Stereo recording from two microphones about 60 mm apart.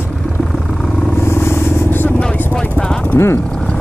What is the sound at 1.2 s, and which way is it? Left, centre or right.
Vehicle, left.